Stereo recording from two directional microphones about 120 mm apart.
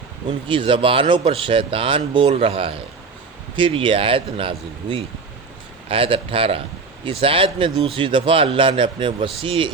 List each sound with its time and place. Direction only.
0.3 s a man's voice: 45° right (ahead or behind)